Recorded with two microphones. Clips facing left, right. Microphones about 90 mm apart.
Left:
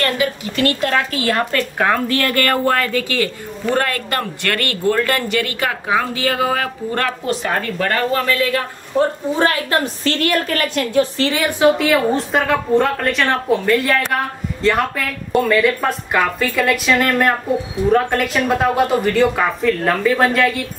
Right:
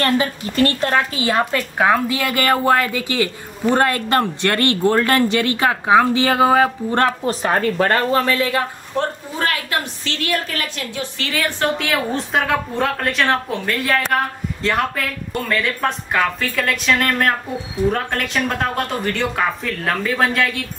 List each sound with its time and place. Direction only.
0.0 s speech: 35° right (ahead or behind)
9.0 s a woman's voice: centre (ahead or behind)
9.4 s a woman's voice: 30° left (ahead or behind)
10.0 s a woman's voice: 50° left (ahead or behind)
11.1 s a woman's voice: 30° left (ahead or behind)
11.8 s a woman's voice: centre (ahead or behind)